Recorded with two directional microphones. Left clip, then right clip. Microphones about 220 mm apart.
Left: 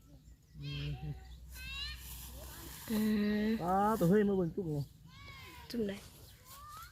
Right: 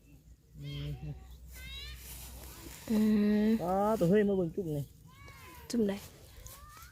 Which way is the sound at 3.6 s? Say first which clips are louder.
Left 1 dB; centre (ahead or behind).